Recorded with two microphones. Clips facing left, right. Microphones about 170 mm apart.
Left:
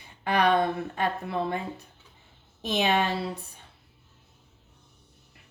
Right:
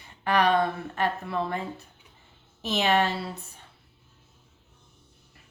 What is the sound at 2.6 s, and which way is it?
Speech, 15° left (ahead or behind).